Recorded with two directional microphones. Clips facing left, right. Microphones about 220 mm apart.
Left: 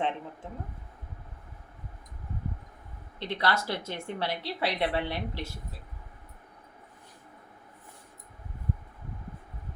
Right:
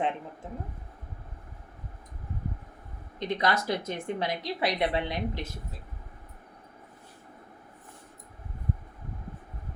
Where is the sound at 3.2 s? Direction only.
15° right (ahead or behind).